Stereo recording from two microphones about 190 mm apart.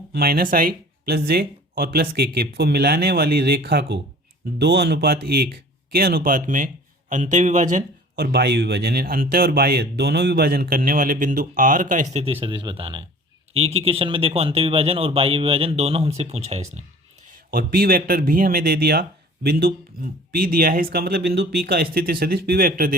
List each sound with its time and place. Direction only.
0.1 s speech: 55° right (ahead or behind)
8.2 s speech: 60° right (ahead or behind); by 12.2 s 45° right (ahead or behind)
12.2 s speech: 30° right (ahead or behind)
17.5 s speech: 55° right (ahead or behind)